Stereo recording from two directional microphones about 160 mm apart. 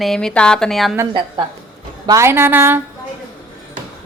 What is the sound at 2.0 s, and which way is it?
Speech, 20° right (ahead or behind).